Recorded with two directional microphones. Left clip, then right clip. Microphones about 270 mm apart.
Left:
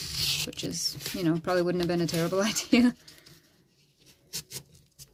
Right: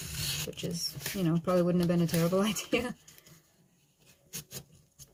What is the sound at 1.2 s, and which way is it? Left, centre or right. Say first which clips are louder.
Speech: left 2 dB; left.